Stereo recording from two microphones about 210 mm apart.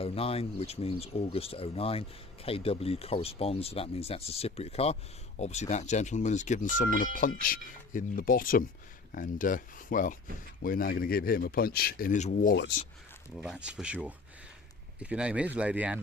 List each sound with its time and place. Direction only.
0.0 s speech: 30° left (ahead or behind)
13.3 s speech: 5° right (ahead or behind)